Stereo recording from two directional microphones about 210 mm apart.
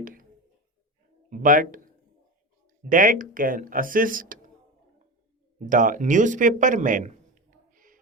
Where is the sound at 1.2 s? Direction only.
40° right (ahead or behind).